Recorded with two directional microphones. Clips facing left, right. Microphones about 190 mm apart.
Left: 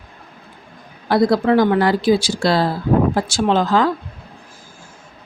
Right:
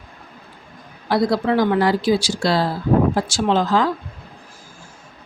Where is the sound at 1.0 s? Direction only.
50° left (ahead or behind).